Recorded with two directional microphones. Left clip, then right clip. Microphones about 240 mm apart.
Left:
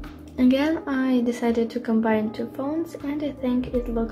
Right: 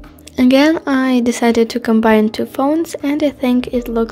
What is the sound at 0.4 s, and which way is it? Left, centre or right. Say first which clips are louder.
A woman's voice: right 10 dB; right.